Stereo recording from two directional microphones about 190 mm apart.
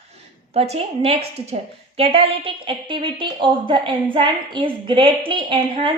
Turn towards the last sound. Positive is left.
turn(degrees=-25)  # may be behind; listen again after turning